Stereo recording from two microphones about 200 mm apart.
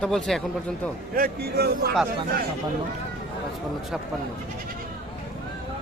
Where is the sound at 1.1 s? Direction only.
50° right (ahead or behind).